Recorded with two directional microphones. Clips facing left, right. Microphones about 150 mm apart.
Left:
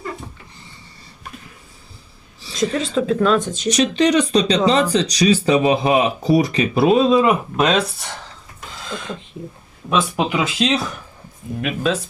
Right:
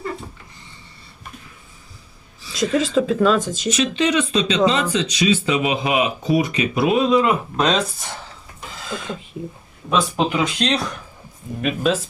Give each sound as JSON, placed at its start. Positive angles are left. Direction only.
{"t": 2.6, "sound": "speech", "side_deg": 0}
{"t": 3.7, "sound": "speech", "side_deg": 35}
{"t": 7.5, "sound": "speech", "side_deg": 5}
{"t": 8.7, "sound": "a sound", "side_deg": 0}
{"t": 9.9, "sound": "speech", "side_deg": 5}